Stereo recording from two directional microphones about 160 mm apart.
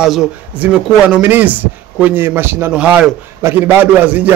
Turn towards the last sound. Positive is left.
turn(degrees=-10)  # may be behind; listen again after turning